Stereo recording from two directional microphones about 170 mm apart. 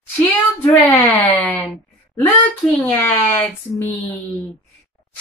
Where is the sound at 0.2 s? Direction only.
15° left (ahead or behind).